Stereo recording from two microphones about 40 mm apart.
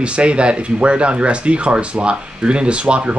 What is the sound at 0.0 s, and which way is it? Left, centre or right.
Speech, right.